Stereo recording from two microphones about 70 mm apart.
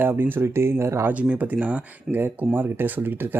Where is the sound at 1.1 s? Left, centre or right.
Right.